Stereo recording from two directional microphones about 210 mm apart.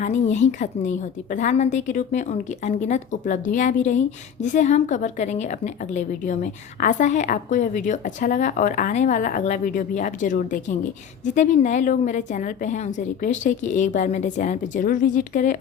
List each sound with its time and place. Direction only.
0.0 s a woman's voice: 35° left (ahead or behind)